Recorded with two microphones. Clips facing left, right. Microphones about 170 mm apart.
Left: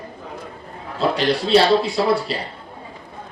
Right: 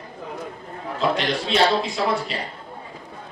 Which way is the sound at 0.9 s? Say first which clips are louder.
Left 3 dB; 35° left (ahead or behind).